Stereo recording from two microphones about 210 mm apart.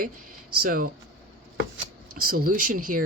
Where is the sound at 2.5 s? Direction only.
40° right (ahead or behind).